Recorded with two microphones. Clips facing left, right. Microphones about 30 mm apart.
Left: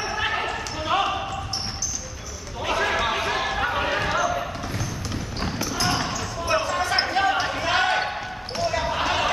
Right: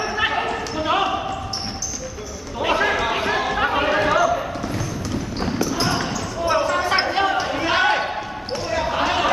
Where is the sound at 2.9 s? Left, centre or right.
Centre.